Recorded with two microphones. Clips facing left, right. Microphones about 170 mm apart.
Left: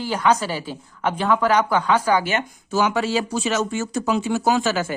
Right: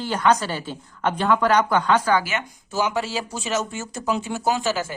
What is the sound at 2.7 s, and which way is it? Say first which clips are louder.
Speech: left 4 dB; 70° left (ahead or behind).